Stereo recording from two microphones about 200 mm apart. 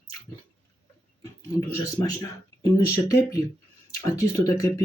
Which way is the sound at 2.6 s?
15° left (ahead or behind).